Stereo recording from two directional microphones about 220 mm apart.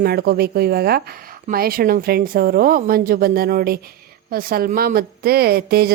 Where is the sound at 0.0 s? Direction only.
45° right (ahead or behind).